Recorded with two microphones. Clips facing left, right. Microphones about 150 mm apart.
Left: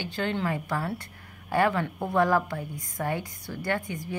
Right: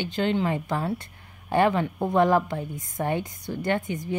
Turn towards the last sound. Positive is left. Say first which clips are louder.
# right 4 dB
turn(degrees=-20)  # may be behind; listen again after turning